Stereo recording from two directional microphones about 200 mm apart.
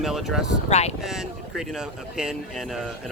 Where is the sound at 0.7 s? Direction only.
35° left (ahead or behind).